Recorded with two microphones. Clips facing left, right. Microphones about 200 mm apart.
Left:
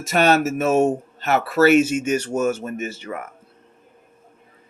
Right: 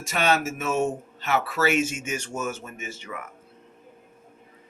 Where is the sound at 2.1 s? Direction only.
65° left (ahead or behind).